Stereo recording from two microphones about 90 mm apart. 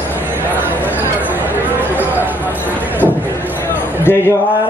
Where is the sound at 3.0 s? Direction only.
20° left (ahead or behind).